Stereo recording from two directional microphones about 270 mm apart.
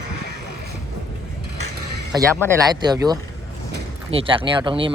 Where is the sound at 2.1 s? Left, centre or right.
Centre.